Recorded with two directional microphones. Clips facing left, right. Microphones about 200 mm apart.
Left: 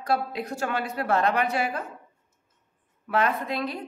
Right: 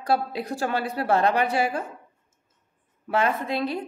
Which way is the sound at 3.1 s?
30° right (ahead or behind).